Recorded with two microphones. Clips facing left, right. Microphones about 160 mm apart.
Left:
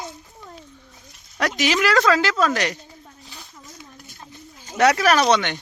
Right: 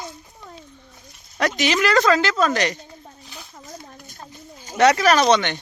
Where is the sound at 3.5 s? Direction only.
45° right (ahead or behind).